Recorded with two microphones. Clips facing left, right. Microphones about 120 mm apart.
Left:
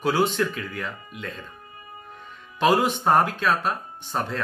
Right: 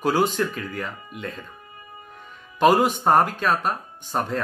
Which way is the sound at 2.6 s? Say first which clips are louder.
Right 3 dB; 50° right (ahead or behind).